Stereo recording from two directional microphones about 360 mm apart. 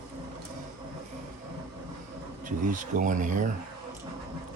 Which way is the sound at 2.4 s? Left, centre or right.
Right.